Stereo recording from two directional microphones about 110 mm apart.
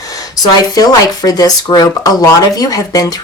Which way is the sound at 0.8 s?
35° left (ahead or behind).